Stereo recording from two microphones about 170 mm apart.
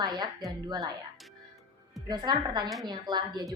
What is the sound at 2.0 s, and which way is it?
A woman's voice, 25° right (ahead or behind).